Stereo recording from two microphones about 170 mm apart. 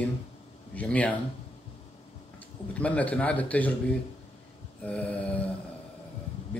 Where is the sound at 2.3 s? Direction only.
10° left (ahead or behind).